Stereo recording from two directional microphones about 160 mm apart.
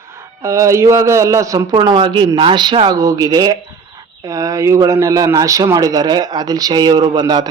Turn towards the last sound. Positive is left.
turn(degrees=-25)  # may be behind; listen again after turning